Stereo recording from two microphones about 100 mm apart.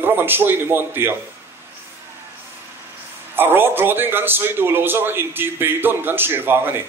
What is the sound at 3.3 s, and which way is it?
A man's voice, 20° right (ahead or behind).